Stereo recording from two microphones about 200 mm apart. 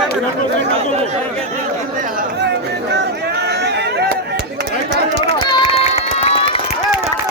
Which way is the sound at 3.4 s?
55° right (ahead or behind).